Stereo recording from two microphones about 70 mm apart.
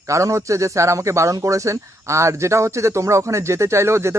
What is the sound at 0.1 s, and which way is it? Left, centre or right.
A man's voice, right.